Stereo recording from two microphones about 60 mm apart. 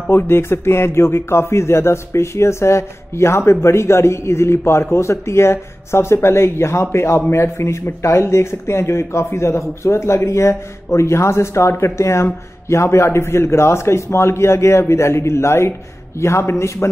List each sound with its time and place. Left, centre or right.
0.1 s speech: left